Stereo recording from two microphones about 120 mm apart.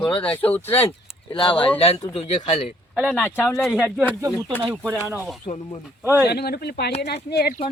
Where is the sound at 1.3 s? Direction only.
45° left (ahead or behind).